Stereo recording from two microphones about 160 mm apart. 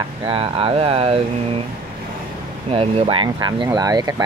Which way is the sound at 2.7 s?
35° right (ahead or behind).